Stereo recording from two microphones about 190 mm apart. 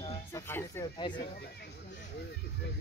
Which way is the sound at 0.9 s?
25° left (ahead or behind).